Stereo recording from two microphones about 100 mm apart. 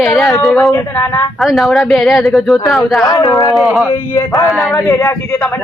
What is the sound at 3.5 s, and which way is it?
Speech, centre (ahead or behind).